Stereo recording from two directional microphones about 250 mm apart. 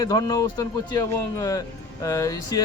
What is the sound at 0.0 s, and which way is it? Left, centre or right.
Speech, centre.